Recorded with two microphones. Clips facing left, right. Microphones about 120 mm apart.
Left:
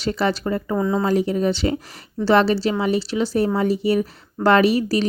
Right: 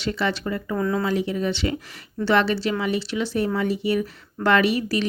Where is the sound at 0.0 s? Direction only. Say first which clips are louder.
Left 4 dB; 35° left (ahead or behind).